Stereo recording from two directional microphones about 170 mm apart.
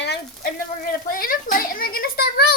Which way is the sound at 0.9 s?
55° left (ahead or behind).